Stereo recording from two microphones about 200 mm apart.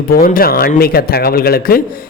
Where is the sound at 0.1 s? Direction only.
45° left (ahead or behind).